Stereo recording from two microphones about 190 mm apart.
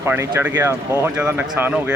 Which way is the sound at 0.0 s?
15° right (ahead or behind).